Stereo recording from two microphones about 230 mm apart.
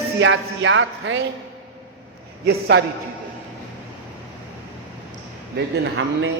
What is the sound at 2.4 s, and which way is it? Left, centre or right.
Speech, right.